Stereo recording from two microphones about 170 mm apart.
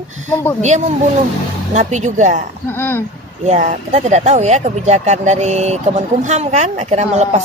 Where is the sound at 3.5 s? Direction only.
40° right (ahead or behind).